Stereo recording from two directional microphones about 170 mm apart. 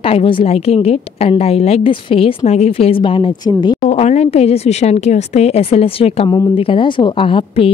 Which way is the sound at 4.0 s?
40° left (ahead or behind).